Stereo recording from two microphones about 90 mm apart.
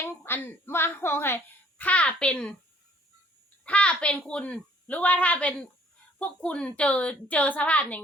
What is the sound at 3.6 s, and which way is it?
A child's voice, 15° left (ahead or behind).